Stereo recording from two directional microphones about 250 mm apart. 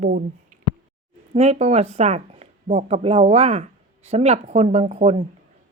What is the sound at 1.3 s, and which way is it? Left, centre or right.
Speech, right.